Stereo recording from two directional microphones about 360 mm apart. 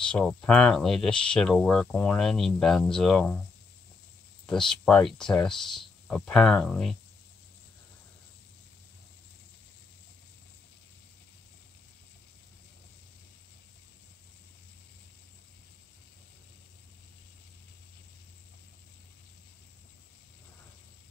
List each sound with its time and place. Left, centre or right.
0.0 s speech: centre
4.5 s speech: centre